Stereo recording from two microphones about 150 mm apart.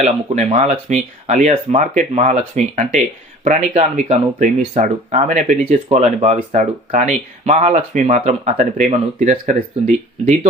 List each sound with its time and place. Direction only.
0.0 s speech: 50° right (ahead or behind)